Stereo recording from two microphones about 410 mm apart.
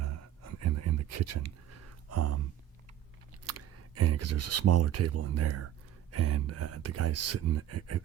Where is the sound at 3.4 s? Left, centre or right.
Right.